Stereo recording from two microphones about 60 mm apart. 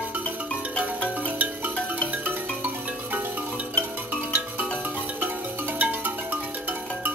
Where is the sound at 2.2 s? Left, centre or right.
Right.